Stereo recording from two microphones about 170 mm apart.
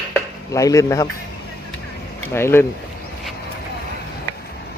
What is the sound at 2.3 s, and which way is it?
Speech, 15° left (ahead or behind).